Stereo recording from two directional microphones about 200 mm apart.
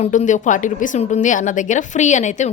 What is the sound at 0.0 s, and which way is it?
A woman's voice, 35° left (ahead or behind).